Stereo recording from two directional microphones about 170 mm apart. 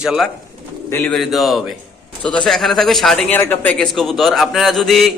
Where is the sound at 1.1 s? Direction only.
Centre (ahead or behind).